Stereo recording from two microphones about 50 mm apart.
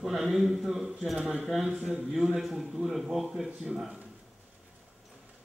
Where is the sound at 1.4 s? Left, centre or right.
Centre.